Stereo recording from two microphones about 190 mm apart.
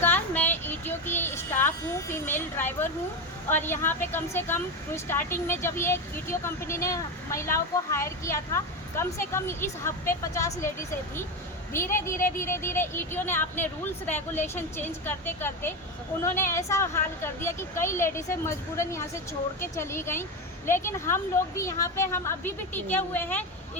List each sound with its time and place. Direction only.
0.0 s a sound: 10° left (ahead or behind)
3.5 s speech: 10° left (ahead or behind)
11.7 s speech: 15° left (ahead or behind)